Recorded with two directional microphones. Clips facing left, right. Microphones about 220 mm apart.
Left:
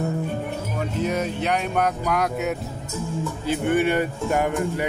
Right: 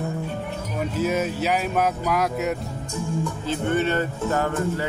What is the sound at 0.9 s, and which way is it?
Speech, 5° right (ahead or behind).